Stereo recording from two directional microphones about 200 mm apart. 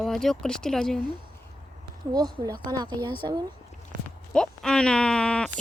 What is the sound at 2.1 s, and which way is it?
Speech, 20° right (ahead or behind).